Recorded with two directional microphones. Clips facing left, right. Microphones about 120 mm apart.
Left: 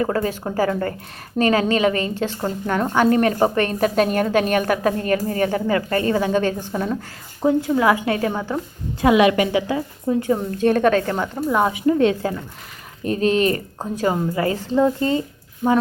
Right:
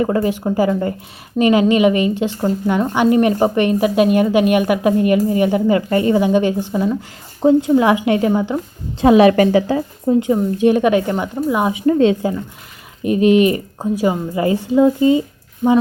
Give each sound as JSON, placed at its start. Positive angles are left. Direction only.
{"t": 0.0, "sound": "a woman's voice", "side_deg": -20}
{"t": 7.4, "sound": "a woman's voice", "side_deg": -25}
{"t": 10.2, "sound": "a woman's voice", "side_deg": -15}
{"t": 11.9, "sound": "a woman's voice", "side_deg": -20}